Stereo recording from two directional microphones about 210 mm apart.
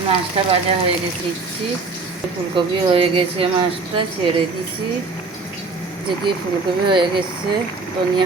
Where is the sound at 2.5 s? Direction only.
25° right (ahead or behind).